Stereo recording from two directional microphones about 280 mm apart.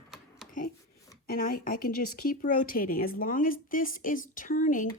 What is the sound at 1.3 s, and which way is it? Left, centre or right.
Speech, left.